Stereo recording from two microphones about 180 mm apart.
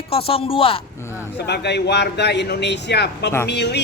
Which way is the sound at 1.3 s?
70° left (ahead or behind).